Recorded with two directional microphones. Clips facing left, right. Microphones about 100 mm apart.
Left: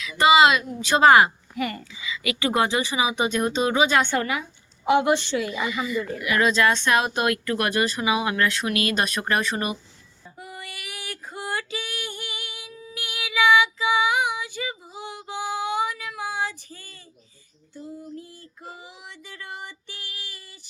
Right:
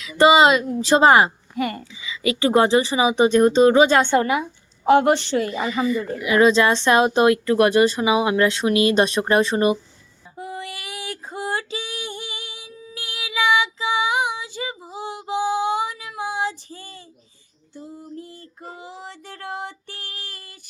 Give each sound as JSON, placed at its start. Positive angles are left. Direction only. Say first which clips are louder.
{"t": 0.0, "sound": "speech", "louder": "right 3 dB", "side_deg": -35}
{"t": 4.0, "sound": "a woman's voice", "louder": "right 6 dB", "side_deg": -25}
{"t": 4.9, "sound": "a woman's voice", "louder": "right 4 dB", "side_deg": -50}
{"t": 10.3, "sound": "female singing", "louder": "right 7 dB", "side_deg": -25}
{"t": 18.9, "sound": "child singing", "louder": "right 6 dB", "side_deg": -45}